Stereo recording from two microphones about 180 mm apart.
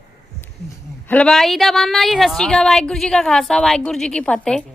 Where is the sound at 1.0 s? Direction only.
5° left (ahead or behind).